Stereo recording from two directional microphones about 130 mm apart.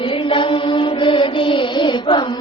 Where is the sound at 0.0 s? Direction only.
40° left (ahead or behind).